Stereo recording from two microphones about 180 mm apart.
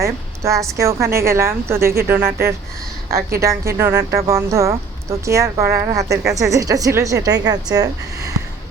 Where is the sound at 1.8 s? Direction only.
55° right (ahead or behind).